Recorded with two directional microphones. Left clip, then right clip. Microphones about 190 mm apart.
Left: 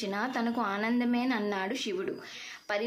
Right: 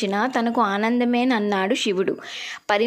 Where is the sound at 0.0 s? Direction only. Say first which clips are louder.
Right 10 dB; 45° right (ahead or behind).